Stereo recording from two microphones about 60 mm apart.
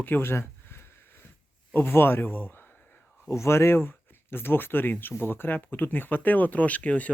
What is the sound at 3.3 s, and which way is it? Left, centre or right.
Speech, left.